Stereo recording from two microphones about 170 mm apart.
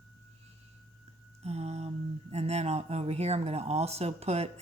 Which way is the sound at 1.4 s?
40° right (ahead or behind).